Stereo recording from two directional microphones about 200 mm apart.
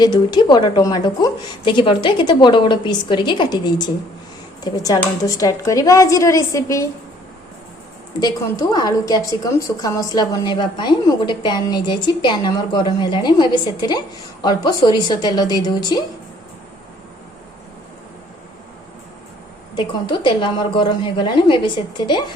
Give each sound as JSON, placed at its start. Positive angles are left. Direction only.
{"t": 0.0, "sound": "a woman's voice", "side_deg": 20}
{"t": 8.2, "sound": "a woman's voice", "side_deg": 20}
{"t": 19.7, "sound": "a woman's voice", "side_deg": 25}